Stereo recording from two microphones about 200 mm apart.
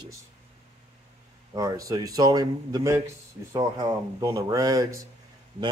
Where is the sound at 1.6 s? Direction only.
15° right (ahead or behind).